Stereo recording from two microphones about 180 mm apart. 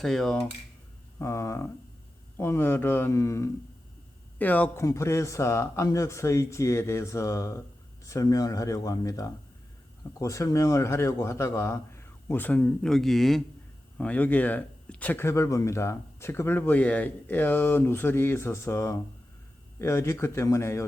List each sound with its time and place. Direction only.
0.0 s speech: centre (ahead or behind)
1.2 s speech: 15° left (ahead or behind)